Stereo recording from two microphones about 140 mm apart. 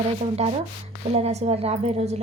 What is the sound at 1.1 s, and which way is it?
A woman's voice, 50° right (ahead or behind).